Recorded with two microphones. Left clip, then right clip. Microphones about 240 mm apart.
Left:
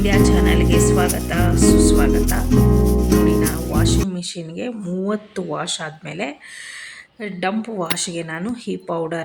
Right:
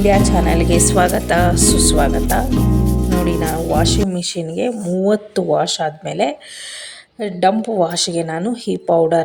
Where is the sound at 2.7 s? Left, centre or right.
Centre.